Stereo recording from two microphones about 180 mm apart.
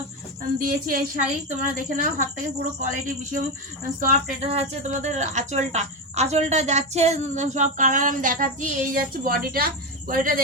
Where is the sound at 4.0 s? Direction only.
45° right (ahead or behind).